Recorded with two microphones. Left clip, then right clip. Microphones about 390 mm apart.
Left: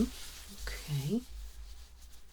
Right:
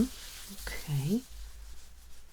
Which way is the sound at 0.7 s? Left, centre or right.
Right.